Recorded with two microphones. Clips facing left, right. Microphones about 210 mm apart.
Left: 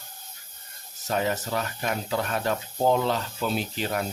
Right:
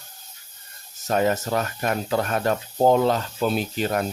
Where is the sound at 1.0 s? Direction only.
50° right (ahead or behind).